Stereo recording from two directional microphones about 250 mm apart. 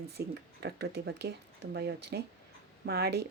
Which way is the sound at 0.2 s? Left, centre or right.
Right.